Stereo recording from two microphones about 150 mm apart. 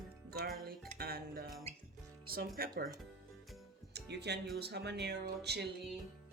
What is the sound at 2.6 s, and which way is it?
Speech, 90° right.